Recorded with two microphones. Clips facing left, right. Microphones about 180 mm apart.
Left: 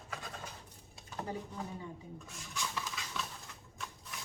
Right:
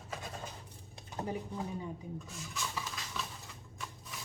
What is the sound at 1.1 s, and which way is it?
Speech, 20° right (ahead or behind).